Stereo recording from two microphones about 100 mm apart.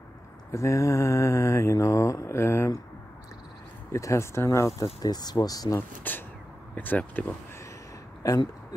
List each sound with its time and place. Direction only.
0.5 s mantra: 30° left (ahead or behind)
3.9 s mantra: 30° left (ahead or behind)
5.0 s speech: 45° left (ahead or behind)
5.8 s mantra: 20° left (ahead or behind)
6.7 s speech: 15° left (ahead or behind)
8.2 s speech: 35° left (ahead or behind)